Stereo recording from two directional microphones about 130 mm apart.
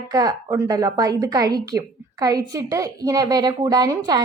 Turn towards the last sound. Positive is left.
turn(degrees=-30)  # may be behind; listen again after turning